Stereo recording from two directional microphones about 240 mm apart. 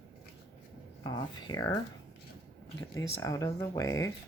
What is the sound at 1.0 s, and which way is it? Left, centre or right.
Speech, centre.